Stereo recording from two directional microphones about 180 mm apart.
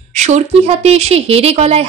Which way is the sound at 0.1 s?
40° right (ahead or behind).